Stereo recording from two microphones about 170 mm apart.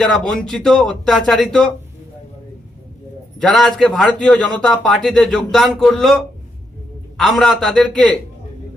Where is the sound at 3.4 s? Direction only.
5° left (ahead or behind).